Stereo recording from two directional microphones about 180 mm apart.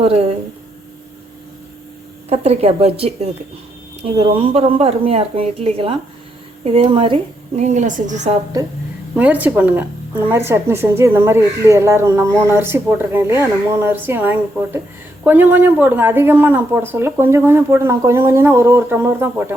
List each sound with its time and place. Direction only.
0.0 s a woman's voice: 35° right (ahead or behind)
2.3 s a woman's voice: 35° right (ahead or behind)
9.1 s speech: 10° right (ahead or behind)